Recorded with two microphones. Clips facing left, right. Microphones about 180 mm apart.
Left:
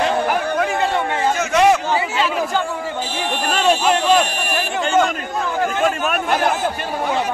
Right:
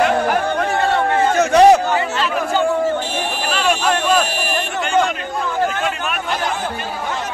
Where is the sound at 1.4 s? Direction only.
35° right (ahead or behind).